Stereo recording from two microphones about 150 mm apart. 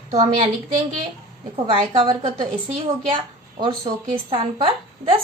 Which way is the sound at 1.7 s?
35° right (ahead or behind).